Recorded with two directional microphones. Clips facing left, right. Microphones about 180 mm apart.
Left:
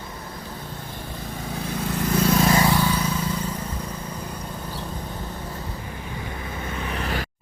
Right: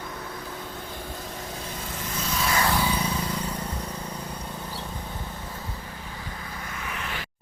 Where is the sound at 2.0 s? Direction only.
65° left (ahead or behind).